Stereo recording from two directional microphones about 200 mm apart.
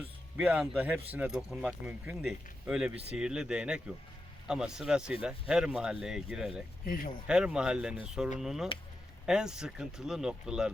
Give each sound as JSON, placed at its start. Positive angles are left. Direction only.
{"t": 0.3, "sound": "speech", "side_deg": -5}
{"t": 6.8, "sound": "speech", "side_deg": 45}
{"t": 7.3, "sound": "speech", "side_deg": -5}